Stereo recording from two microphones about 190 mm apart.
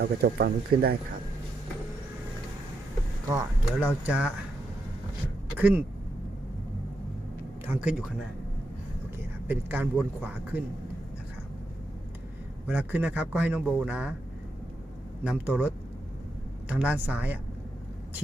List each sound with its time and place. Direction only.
0.0 s speech: 55° right (ahead or behind)
3.2 s a man's voice: 15° right (ahead or behind)
5.5 s a man's voice: 10° right (ahead or behind)
7.7 s a man's voice: 5° right (ahead or behind)
9.5 s a man's voice: 10° right (ahead or behind)
12.6 s a man's voice: 10° right (ahead or behind)
15.2 s a man's voice: 5° right (ahead or behind)